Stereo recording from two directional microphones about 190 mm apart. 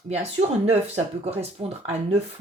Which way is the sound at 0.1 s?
35° right (ahead or behind).